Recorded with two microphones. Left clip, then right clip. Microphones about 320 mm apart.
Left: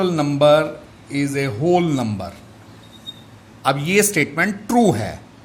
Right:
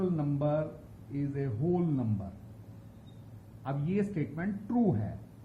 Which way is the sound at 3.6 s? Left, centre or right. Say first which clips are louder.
Left 18 dB; left.